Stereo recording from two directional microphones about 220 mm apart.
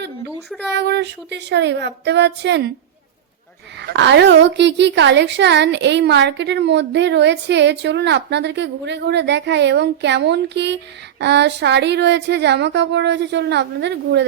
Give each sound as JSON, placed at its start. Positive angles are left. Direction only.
{"t": 0.7, "sound": "a woman's voice", "side_deg": -50}
{"t": 3.8, "sound": "a woman's voice", "side_deg": -50}